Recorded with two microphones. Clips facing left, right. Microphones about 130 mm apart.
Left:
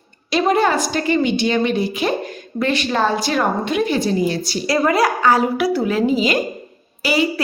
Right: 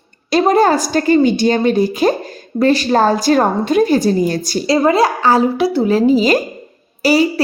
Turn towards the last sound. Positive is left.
turn(degrees=-40)  # may be behind; listen again after turning